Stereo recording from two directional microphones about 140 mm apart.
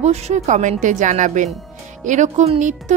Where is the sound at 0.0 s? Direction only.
55° right (ahead or behind).